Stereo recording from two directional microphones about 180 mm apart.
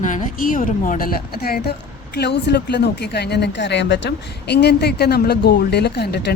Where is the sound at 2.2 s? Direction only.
70° left (ahead or behind).